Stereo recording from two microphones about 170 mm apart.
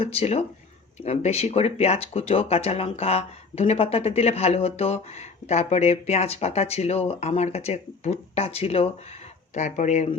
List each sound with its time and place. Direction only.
0.0 s speech: 35° left (ahead or behind)